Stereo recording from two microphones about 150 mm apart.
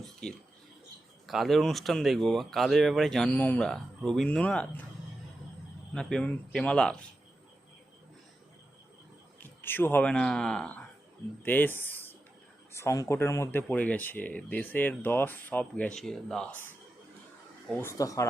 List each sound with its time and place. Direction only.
0.0 s a sound: 5° left (ahead or behind)
1.3 s speech: centre (ahead or behind)
5.9 s speech: 5° left (ahead or behind)
9.4 s speech: 15° left (ahead or behind)
17.7 s speech: 20° left (ahead or behind)